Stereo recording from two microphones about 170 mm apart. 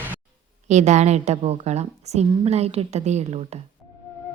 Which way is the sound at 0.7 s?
40° right (ahead or behind).